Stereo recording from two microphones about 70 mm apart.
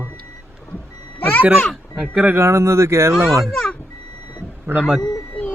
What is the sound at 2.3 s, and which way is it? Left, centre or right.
Speech, right.